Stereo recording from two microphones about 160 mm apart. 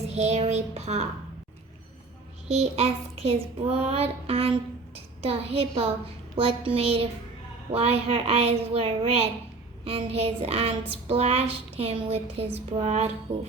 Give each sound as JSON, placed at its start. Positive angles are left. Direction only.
{"t": 0.1, "sound": "a sound", "side_deg": -45}
{"t": 2.5, "sound": "child singing", "side_deg": -40}
{"t": 4.9, "sound": "a woman's voice", "side_deg": -40}
{"t": 6.3, "sound": "child singing", "side_deg": -35}